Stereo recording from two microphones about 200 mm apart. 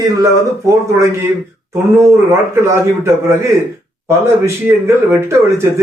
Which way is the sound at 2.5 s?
15° right (ahead or behind).